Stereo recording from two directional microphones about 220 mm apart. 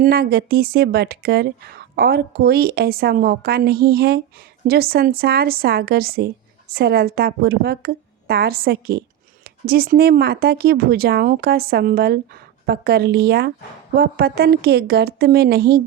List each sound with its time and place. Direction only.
0.0 s a woman's voice: 45° right (ahead or behind)